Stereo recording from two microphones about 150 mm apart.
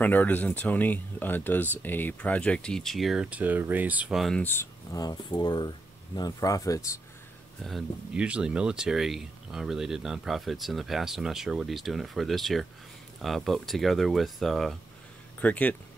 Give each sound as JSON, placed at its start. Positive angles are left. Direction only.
{"t": 0.0, "sound": "speech", "side_deg": 10}
{"t": 4.4, "sound": "speech", "side_deg": 15}
{"t": 4.9, "sound": "speech", "side_deg": 25}
{"t": 7.6, "sound": "speech", "side_deg": -5}